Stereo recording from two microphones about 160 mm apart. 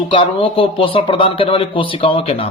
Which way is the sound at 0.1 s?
35° left (ahead or behind).